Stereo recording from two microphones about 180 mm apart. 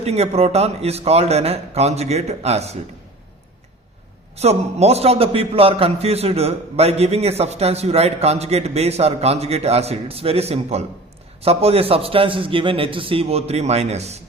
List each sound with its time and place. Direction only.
0.0 s a man's voice: 35° right (ahead or behind)
4.4 s a man's voice: 35° right (ahead or behind)